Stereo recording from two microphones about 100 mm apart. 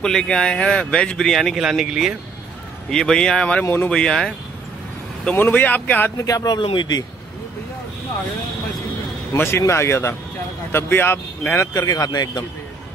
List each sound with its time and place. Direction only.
0.0 s speech: 5° left (ahead or behind)
3.6 s speech: 20° left (ahead or behind)
3.9 s speech: 5° left (ahead or behind)
6.1 s speech: 35° left (ahead or behind)
6.6 s speech: 55° left (ahead or behind)
9.4 s speech: 25° left (ahead or behind)
11.8 s speech: 40° left (ahead or behind)